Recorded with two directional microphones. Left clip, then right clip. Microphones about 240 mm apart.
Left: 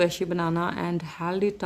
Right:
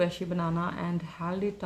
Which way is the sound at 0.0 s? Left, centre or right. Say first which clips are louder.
Left 5 dB; left.